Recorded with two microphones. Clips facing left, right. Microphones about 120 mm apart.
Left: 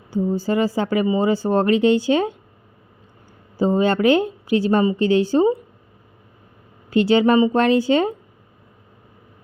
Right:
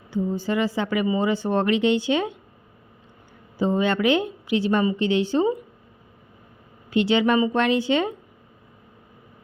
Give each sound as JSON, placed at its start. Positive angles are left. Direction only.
{"t": 0.1, "sound": "speech", "side_deg": 40}
{"t": 3.6, "sound": "speech", "side_deg": 40}
{"t": 6.9, "sound": "speech", "side_deg": 40}